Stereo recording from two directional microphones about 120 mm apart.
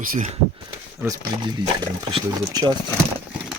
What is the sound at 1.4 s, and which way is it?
Speech, 35° right (ahead or behind).